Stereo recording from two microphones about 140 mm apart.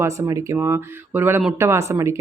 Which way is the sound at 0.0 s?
20° right (ahead or behind).